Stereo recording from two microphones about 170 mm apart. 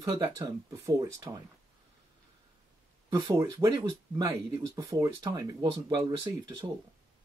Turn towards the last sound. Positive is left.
turn(degrees=-25)  # may be behind; listen again after turning